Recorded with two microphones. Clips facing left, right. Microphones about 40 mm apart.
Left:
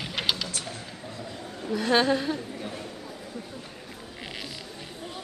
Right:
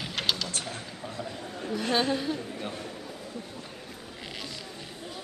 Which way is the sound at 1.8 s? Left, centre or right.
Left.